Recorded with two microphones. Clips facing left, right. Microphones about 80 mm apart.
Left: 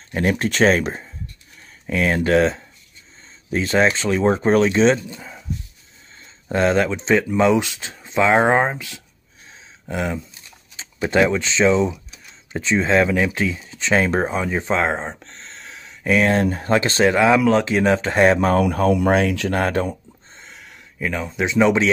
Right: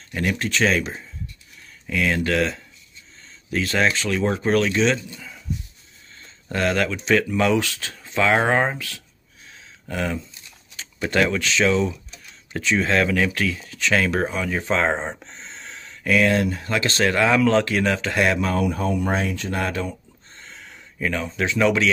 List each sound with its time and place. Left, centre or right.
0.1 s speech: left
0.5 s speech: left
1.9 s speech: left
6.5 s speech: left
9.5 s a sound: centre
10.8 s speech: centre
14.8 s a sound: centre
16.1 s speech: left
17.1 s speech: centre
17.9 s speech: left
18.4 s speech: left
19.5 s speech: left
20.3 s a sound: centre